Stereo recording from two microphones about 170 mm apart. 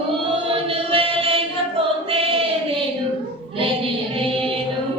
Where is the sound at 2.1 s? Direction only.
35° right (ahead or behind).